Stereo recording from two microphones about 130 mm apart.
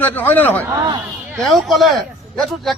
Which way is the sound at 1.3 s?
Centre (ahead or behind).